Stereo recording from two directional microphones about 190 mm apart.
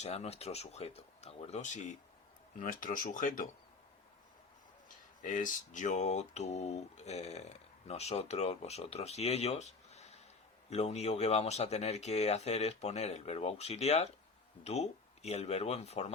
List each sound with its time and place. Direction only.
0.0 s speech: 35° left (ahead or behind)
5.2 s speech: 40° left (ahead or behind)